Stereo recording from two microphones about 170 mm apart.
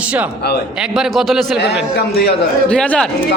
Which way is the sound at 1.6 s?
75° left (ahead or behind).